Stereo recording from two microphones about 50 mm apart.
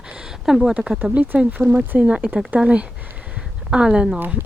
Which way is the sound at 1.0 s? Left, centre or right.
Right.